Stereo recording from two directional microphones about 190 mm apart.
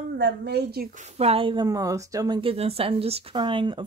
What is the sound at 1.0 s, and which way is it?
Speech, 30° right (ahead or behind).